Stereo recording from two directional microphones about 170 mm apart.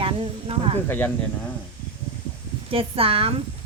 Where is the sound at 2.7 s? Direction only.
35° right (ahead or behind).